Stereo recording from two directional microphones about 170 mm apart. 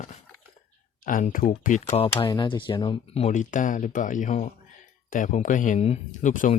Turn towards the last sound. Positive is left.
turn(degrees=50)  # may be behind; listen again after turning